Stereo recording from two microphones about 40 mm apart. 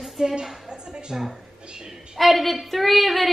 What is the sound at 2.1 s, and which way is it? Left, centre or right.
A woman's voice, centre.